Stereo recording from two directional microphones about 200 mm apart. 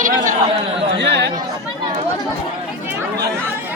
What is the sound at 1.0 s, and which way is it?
Speech, 60° right (ahead or behind).